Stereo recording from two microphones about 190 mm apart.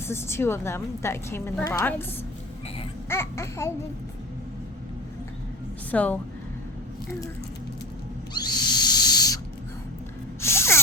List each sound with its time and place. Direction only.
0.0 s a woman's voice: 15° left (ahead or behind)
3.1 s a woman's voice: 15° left (ahead or behind)
5.9 s a woman's voice: 10° left (ahead or behind)
8.3 s owl: 20° left (ahead or behind)
10.4 s gasp: 15° left (ahead or behind)